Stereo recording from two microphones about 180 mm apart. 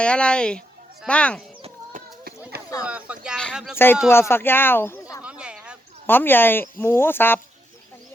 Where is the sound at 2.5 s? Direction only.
60° right (ahead or behind).